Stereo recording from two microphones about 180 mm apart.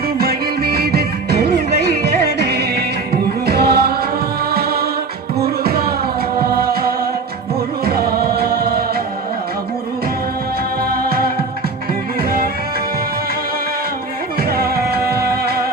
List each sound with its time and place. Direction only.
0.2 s music: 60° right (ahead or behind)
10.8 s music: 60° right (ahead or behind)
14.5 s music: 60° right (ahead or behind)